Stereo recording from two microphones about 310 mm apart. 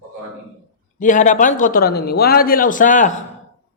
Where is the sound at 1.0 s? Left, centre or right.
Left.